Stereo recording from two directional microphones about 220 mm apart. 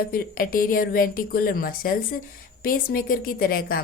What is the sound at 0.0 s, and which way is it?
A woman's voice, 40° left (ahead or behind).